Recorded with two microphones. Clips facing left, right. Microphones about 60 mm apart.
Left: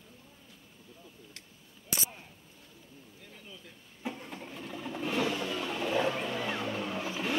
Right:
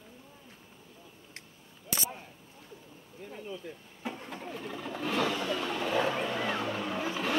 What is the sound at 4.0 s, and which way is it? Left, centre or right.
Vehicle, centre.